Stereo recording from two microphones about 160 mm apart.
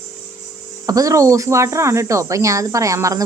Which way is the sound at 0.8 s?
20° right (ahead or behind).